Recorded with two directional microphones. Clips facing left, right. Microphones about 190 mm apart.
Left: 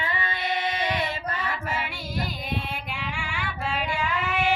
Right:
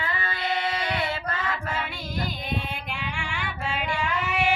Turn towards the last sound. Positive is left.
turn(degrees=0)  # may be behind; listen again after turning